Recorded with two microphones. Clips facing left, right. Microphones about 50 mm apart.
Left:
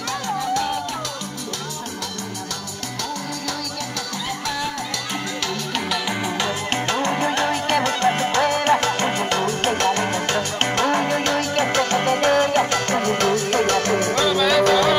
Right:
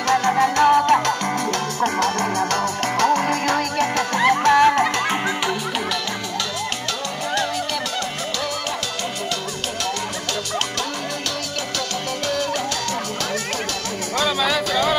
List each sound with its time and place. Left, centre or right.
0.1 s music: right
4.2 s music: right
7.3 s music: left
11.9 s music: left